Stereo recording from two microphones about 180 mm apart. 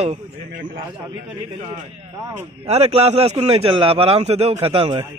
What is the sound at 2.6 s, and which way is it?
A man's voice, 35° right (ahead or behind).